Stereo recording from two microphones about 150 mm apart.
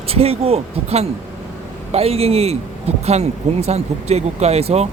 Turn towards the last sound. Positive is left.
turn(degrees=-45)  # may be behind; listen again after turning